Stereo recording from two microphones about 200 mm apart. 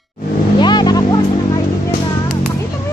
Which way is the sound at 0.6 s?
20° left (ahead or behind).